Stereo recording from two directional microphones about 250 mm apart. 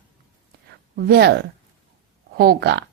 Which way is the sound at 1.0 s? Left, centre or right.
Right.